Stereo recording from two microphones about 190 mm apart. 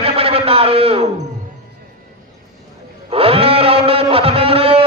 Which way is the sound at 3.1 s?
30° right (ahead or behind).